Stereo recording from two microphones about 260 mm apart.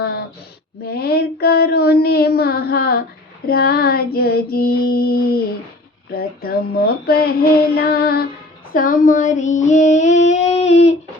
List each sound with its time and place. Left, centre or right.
0.9 s a sound: left
3.4 s child singing: left
6.1 s speech: left
7.7 s child singing: left
8.7 s female singing: left